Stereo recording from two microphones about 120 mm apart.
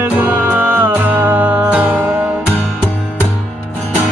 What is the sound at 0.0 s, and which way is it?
Music, 15° right (ahead or behind).